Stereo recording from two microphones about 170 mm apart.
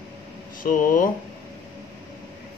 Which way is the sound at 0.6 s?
55° left (ahead or behind).